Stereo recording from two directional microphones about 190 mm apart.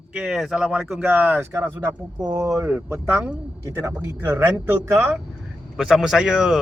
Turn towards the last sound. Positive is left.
turn(degrees=-5)  # may be behind; listen again after turning